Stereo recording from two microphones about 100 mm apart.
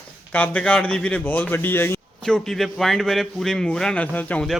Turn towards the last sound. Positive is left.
turn(degrees=15)  # may be behind; listen again after turning